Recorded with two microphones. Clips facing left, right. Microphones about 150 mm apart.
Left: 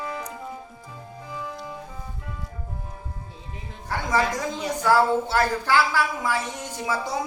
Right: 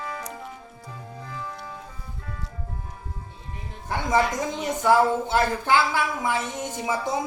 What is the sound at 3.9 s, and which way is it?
A woman's voice, 20° right (ahead or behind).